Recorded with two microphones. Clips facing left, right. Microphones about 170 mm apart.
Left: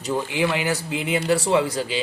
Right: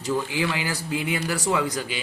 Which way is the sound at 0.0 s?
20° left (ahead or behind).